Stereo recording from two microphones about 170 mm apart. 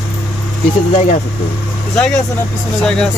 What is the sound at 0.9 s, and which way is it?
Speech, 50° left (ahead or behind).